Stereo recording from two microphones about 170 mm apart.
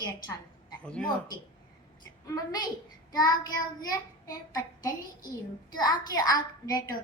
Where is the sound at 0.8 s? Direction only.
5° left (ahead or behind).